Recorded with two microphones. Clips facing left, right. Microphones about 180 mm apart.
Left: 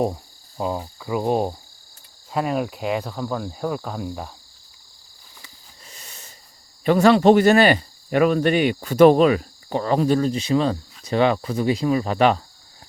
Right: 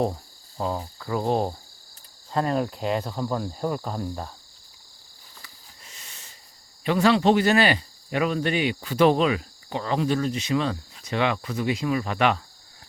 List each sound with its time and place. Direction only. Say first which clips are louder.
0.0 s cricket: left 2 dB; 10° left (ahead or behind)
5.9 s a sound: left 5 dB; 40° left (ahead or behind)
6.8 s speech: left 5 dB; 45° left (ahead or behind)